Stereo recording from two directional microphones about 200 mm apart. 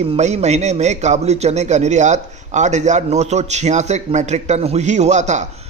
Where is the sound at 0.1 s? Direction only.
35° right (ahead or behind).